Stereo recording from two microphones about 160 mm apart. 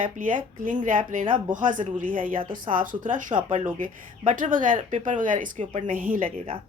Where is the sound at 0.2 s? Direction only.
55° right (ahead or behind).